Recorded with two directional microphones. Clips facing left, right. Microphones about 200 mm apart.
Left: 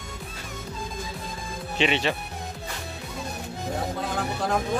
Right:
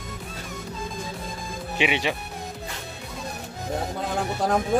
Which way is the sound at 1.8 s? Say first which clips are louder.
Even; 10° right (ahead or behind).